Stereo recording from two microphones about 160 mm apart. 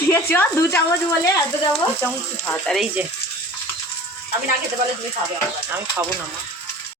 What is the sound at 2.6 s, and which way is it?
Speech, centre (ahead or behind).